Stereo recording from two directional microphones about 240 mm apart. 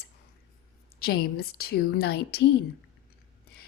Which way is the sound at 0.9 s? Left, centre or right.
Left.